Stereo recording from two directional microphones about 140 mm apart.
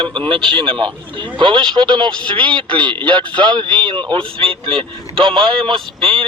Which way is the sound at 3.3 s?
35° right (ahead or behind).